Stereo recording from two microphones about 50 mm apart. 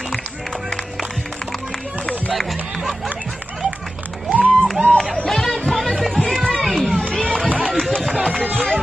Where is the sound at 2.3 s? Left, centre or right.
Centre.